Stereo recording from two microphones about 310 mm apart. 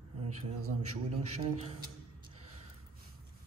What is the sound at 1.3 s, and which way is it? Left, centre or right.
Speech, centre.